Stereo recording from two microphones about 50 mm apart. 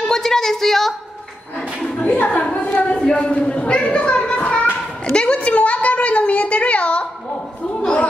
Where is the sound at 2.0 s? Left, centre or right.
Left.